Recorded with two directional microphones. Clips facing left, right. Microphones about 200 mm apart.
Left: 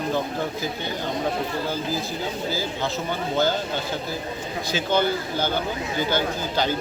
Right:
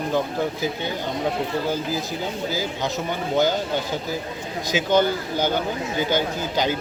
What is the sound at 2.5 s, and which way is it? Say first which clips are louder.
Speech: right 1 dB; 15° right (ahead or behind).